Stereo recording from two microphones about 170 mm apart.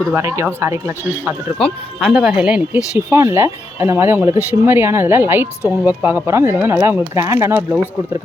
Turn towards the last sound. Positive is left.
turn(degrees=-15)  # may be behind; listen again after turning